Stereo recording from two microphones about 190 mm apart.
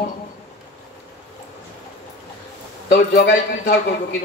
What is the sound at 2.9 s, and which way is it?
Speech, 60° left (ahead or behind).